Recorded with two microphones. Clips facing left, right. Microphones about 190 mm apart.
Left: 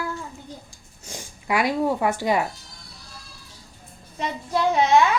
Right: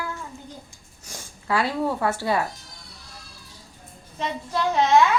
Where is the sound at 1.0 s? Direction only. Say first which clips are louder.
Left 1 dB; 15° left (ahead or behind).